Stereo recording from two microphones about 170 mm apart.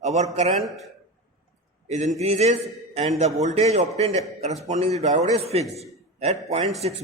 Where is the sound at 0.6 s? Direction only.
Centre (ahead or behind).